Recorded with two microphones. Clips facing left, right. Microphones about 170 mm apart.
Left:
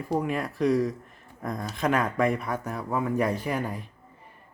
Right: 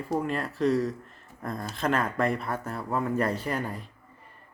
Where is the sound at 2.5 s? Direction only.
10° left (ahead or behind).